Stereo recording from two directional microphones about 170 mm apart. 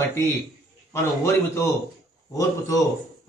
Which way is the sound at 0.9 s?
15° left (ahead or behind).